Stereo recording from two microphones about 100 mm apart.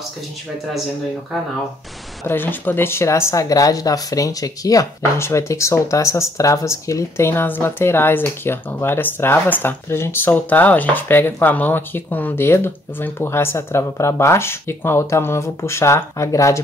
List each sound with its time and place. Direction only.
2.2 s a woman's voice: 20° left (ahead or behind)